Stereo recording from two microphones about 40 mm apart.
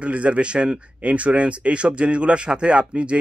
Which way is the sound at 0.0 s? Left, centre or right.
Right.